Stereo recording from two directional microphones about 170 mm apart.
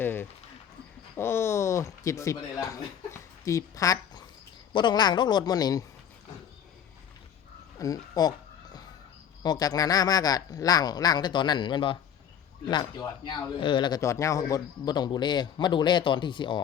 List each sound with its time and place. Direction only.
0.0 s a sound: 10° left (ahead or behind)
1.1 s a man's voice: 15° left (ahead or behind)
7.8 s speech: 20° left (ahead or behind)
9.4 s a man's voice: 20° left (ahead or behind)